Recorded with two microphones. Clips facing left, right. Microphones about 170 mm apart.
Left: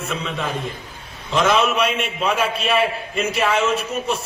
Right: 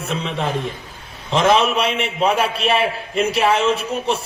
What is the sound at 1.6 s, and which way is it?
A man's voice, 30° right (ahead or behind).